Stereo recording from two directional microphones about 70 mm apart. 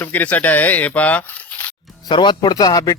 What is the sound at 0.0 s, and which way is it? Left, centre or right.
Speech, left.